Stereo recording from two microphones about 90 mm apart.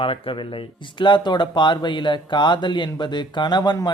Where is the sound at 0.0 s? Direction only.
75° left (ahead or behind).